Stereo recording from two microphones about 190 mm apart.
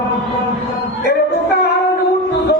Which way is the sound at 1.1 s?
55° left (ahead or behind).